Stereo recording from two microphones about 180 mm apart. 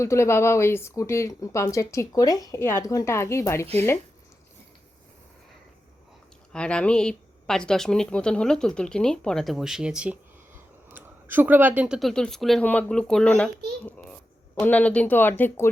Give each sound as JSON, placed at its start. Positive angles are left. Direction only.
{"t": 0.0, "sound": "speech", "side_deg": 15}
{"t": 6.5, "sound": "speech", "side_deg": 5}
{"t": 13.8, "sound": "babbling", "side_deg": 5}
{"t": 14.6, "sound": "speech", "side_deg": 10}